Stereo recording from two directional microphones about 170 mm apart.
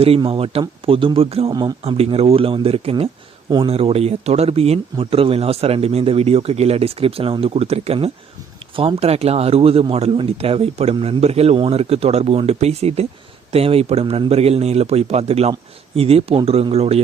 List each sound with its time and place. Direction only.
0.0 s speech: 35° right (ahead or behind)